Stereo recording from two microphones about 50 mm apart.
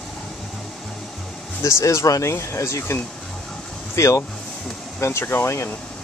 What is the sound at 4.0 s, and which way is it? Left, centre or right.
Speech, left.